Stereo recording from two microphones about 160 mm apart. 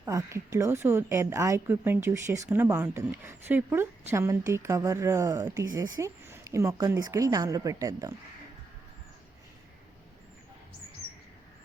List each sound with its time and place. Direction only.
0.0 s a woman's voice: 20° right (ahead or behind)